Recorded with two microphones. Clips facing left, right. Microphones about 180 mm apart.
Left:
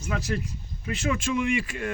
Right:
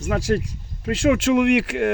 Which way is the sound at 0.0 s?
90° right.